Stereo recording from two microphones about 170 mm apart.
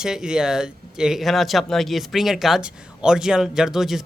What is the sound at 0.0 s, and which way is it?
A woman's voice, 5° right (ahead or behind).